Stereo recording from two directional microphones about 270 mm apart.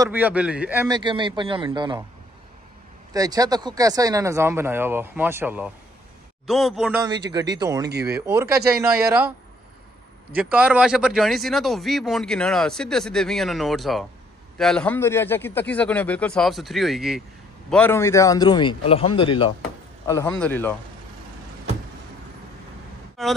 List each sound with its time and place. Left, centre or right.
0.0 s speech: centre
3.1 s speech: centre
7.2 s speech: centre
10.3 s speech: centre
20.1 s speech: centre
23.2 s speech: centre